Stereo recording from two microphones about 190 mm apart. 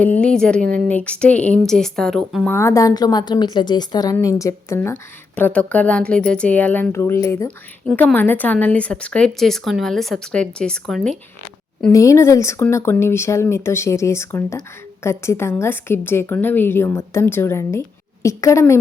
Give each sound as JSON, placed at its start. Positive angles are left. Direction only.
{"t": 0.0, "sound": "a woman's voice", "side_deg": 5}
{"t": 2.6, "sound": "a woman's voice", "side_deg": 15}
{"t": 11.9, "sound": "a woman's voice", "side_deg": 15}